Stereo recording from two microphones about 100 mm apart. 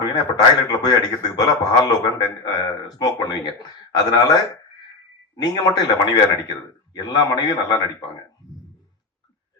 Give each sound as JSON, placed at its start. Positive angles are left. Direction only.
{"t": 0.0, "sound": "a man's voice", "side_deg": 45}
{"t": 5.4, "sound": "speech", "side_deg": 45}